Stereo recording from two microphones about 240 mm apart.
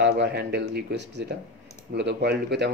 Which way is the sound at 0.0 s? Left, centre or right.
Right.